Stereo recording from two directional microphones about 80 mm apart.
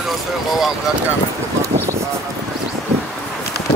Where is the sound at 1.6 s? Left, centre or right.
Right.